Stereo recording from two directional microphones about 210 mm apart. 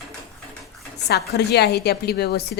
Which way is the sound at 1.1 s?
50° left (ahead or behind).